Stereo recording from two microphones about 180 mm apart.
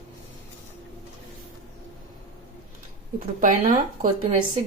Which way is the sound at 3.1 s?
45° right (ahead or behind).